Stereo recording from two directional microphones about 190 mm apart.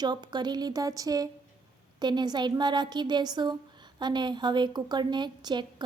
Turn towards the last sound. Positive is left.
turn(degrees=-25)  # may be behind; listen again after turning